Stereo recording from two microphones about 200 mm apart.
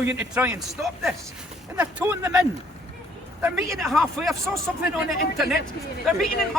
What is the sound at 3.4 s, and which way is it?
Speech, 10° right (ahead or behind).